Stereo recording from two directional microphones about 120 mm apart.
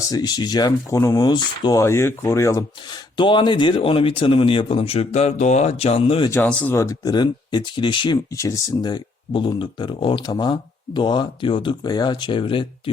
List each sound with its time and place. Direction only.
0.1 s speech: 35° left (ahead or behind)
1.8 s speech: 20° left (ahead or behind)
3.2 s speech: 40° left (ahead or behind)
6.5 s speech: 10° left (ahead or behind)
6.7 s speech: 30° left (ahead or behind)
8.4 s speech: 25° left (ahead or behind); by 12.9 s 45° left (ahead or behind)